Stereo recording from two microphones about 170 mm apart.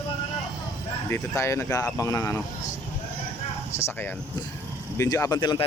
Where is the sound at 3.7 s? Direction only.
15° left (ahead or behind).